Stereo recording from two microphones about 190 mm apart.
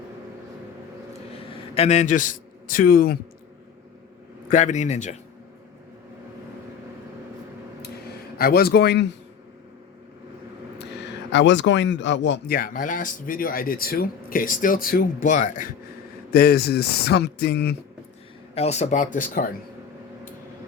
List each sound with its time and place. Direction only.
1.3 s a man's voice: 30° left (ahead or behind); by 3.2 s 50° left (ahead or behind)
4.4 s speech: 40° left (ahead or behind)
8.4 s speech: 50° left (ahead or behind)
11.3 s speech: 70° left (ahead or behind); by 15.6 s 45° left (ahead or behind)
16.3 s speech: 55° left (ahead or behind)
18.5 s speech: 35° left (ahead or behind)